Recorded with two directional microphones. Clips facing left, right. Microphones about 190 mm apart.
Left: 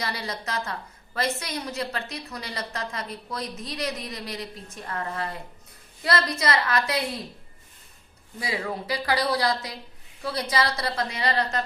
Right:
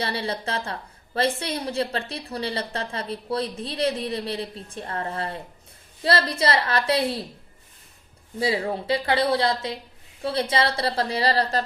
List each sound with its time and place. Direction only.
0.0 s a woman's voice: 30° right (ahead or behind)
8.4 s a woman's voice: 30° right (ahead or behind)